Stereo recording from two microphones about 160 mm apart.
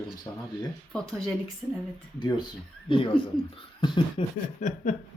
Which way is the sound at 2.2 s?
30° left (ahead or behind).